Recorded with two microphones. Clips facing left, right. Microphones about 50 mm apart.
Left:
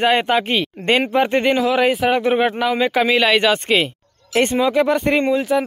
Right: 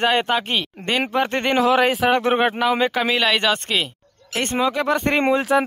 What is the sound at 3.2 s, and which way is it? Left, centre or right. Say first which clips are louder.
Speech: left 4 dB; left.